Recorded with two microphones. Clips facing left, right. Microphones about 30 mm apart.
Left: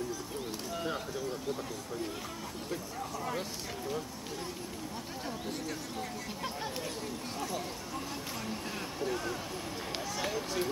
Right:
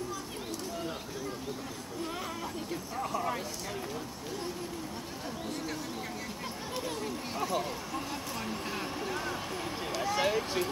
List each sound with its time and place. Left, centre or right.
3.0 s speech: centre
7.3 s speech: centre